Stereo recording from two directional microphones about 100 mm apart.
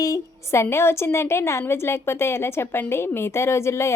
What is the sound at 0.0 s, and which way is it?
A woman's voice, 30° left (ahead or behind).